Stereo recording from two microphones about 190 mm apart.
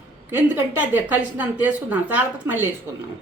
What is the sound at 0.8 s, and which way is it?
Speech, 10° right (ahead or behind).